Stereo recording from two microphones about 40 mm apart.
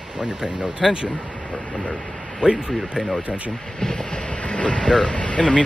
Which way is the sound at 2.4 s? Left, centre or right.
Right.